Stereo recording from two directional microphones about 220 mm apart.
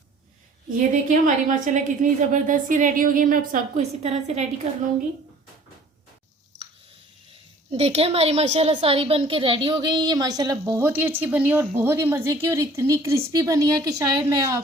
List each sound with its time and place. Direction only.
0.8 s a woman's voice: 35° right (ahead or behind)
7.7 s a woman's voice: 30° right (ahead or behind)